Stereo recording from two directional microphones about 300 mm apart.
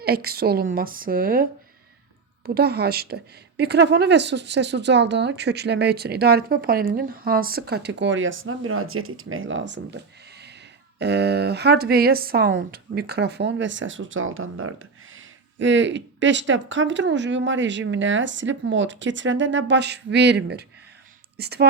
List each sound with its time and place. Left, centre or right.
0.0 s a woman's voice: right
2.6 s speech: right
11.0 s speech: right